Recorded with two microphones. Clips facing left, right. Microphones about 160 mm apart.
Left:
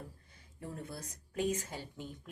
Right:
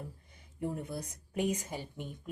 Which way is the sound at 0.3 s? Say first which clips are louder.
Right 8 dB; 20° right (ahead or behind).